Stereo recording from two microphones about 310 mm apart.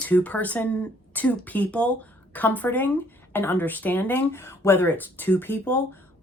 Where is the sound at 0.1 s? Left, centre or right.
Centre.